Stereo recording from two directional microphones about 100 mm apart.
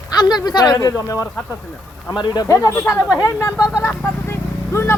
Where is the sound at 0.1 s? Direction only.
40° left (ahead or behind).